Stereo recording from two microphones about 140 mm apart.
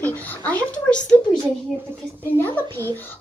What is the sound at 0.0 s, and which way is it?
A child's voice, 10° left (ahead or behind).